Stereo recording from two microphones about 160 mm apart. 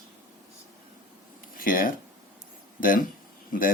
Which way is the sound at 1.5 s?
60° left (ahead or behind).